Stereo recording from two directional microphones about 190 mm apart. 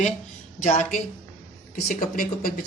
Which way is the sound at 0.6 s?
40° left (ahead or behind).